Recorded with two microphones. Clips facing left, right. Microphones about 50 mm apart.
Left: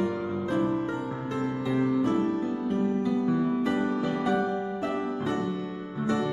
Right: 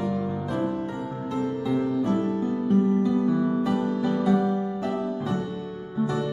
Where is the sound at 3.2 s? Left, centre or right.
Left.